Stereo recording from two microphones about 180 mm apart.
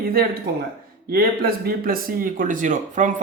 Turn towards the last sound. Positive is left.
turn(degrees=-45)  # may be behind; listen again after turning